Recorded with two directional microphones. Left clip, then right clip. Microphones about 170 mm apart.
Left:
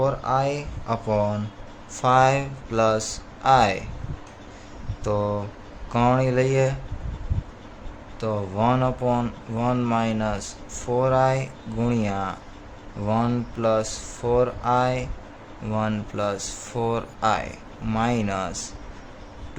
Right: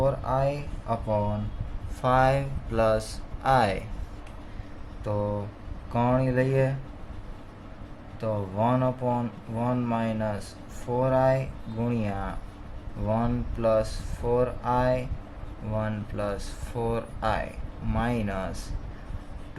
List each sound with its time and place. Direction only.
0.0 s speech: 35° left (ahead or behind)
2.0 s speech: 25° left (ahead or behind)
5.0 s speech: 35° left (ahead or behind)
8.2 s speech: 35° left (ahead or behind)